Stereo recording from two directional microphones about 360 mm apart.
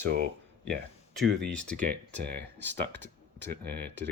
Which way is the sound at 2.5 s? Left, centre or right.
Centre.